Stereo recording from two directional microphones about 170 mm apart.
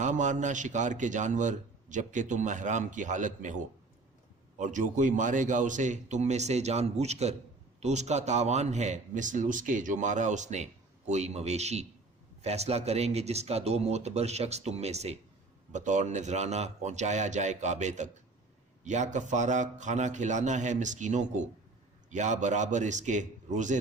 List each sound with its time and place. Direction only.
0.0 s speech: 45° right (ahead or behind)